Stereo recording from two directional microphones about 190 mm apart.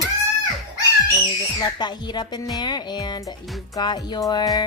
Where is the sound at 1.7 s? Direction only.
20° left (ahead or behind).